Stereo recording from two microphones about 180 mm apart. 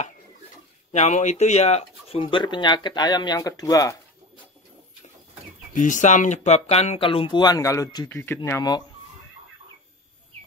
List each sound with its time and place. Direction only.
0.9 s speech: 40° left (ahead or behind); by 3.9 s 20° left (ahead or behind)
5.8 s speech: 45° left (ahead or behind); by 8.8 s 20° left (ahead or behind)